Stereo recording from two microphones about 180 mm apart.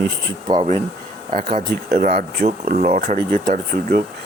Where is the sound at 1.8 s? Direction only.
55° right (ahead or behind).